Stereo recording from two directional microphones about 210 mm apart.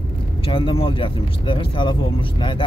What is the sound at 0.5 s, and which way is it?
Speech, 25° left (ahead or behind).